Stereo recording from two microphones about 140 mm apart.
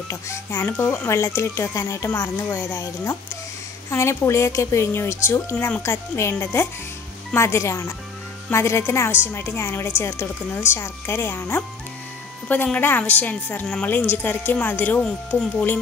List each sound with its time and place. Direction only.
0.1 s a woman's voice: 20° left (ahead or behind)